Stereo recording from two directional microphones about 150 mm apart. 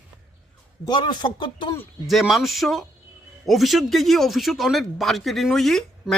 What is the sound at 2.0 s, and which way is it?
A man's voice, centre (ahead or behind).